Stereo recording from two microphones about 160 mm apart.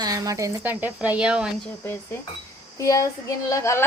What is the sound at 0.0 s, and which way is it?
Speech, 20° right (ahead or behind).